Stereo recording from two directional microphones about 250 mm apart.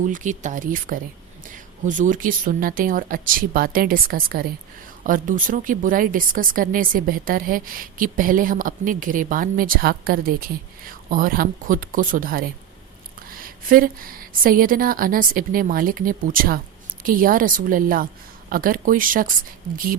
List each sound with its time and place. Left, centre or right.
0.0 s a woman's voice: right